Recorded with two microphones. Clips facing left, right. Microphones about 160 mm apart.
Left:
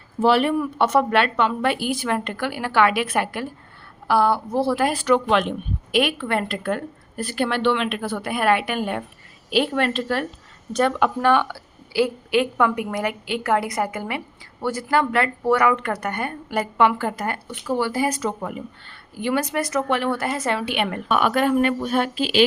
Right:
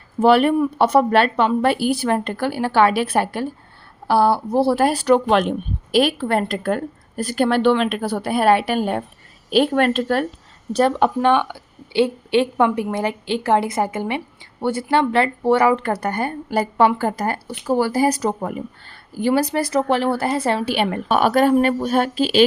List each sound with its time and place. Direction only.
0.2 s speech: 50° right (ahead or behind)
0.8 s speech: 35° right (ahead or behind)
9.5 s speech: 45° right (ahead or behind)
10.7 s speech: 35° right (ahead or behind)
11.2 s a woman's voice: 20° right (ahead or behind); by 22.4 s 40° right (ahead or behind)